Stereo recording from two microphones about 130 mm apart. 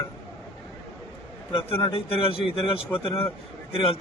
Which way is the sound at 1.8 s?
45° left (ahead or behind).